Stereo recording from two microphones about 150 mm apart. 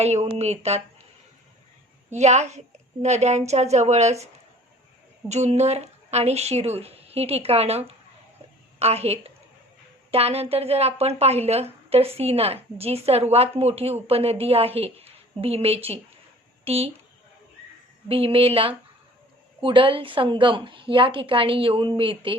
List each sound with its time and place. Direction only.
0.0 s speech: 45° right (ahead or behind)
2.0 s speech: 50° right (ahead or behind)
5.3 s a woman's voice: 50° right (ahead or behind)
18.1 s a woman's voice: 40° right (ahead or behind)